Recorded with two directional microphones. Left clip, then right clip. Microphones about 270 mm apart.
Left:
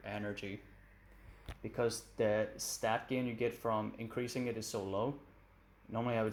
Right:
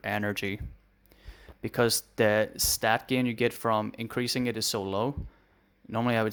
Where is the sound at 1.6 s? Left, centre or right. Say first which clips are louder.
Right 10 dB; right.